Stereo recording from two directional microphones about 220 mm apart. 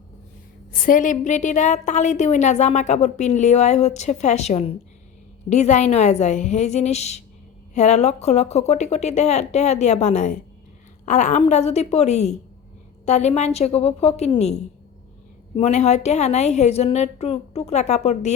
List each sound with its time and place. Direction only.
0.7 s a woman's voice: 40° left (ahead or behind)